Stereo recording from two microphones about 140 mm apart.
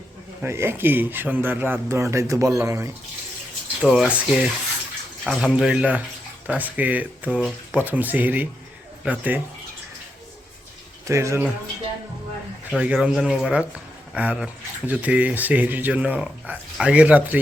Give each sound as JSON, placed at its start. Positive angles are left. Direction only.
{"t": 0.4, "sound": "speech", "side_deg": -20}
{"t": 3.8, "sound": "speech", "side_deg": -5}
{"t": 11.0, "sound": "speech", "side_deg": -20}
{"t": 12.8, "sound": "speech", "side_deg": -5}